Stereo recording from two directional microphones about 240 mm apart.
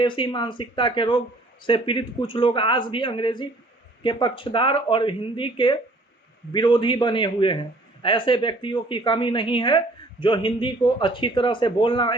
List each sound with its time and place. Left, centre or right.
0.0 s a woman's voice: centre